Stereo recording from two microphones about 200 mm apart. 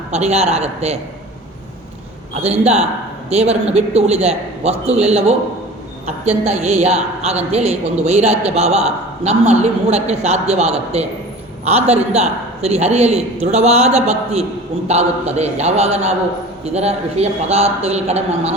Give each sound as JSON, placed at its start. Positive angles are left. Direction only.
{"t": 0.1, "sound": "a man's voice", "side_deg": -35}
{"t": 2.4, "sound": "a man's voice", "side_deg": -30}